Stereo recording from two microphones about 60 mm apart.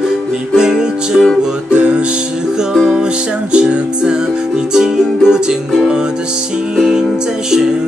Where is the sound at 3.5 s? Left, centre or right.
Centre.